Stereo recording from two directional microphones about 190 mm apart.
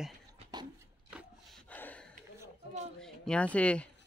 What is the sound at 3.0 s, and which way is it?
Speech, 5° left (ahead or behind).